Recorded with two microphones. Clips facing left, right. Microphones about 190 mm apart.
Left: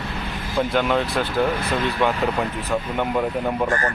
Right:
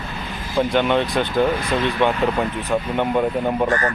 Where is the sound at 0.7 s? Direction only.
Centre (ahead or behind).